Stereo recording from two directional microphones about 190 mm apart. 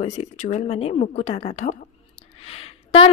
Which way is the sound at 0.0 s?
35° left (ahead or behind).